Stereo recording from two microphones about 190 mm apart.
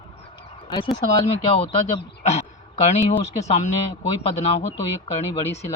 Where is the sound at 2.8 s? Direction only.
35° left (ahead or behind).